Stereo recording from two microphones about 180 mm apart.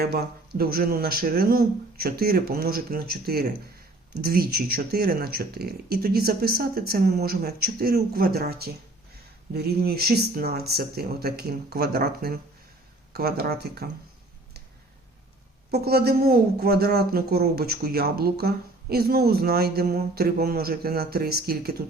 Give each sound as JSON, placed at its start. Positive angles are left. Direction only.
{"t": 0.0, "sound": "speech", "side_deg": -60}
{"t": 15.7, "sound": "speech", "side_deg": -60}